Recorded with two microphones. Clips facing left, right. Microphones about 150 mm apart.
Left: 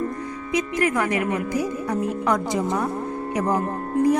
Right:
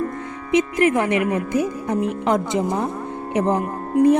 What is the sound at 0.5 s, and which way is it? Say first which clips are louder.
A woman's voice: right 5 dB; 25° right (ahead or behind).